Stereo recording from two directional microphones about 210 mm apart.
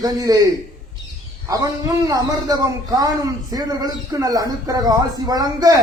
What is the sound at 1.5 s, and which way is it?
A man's voice, 15° right (ahead or behind).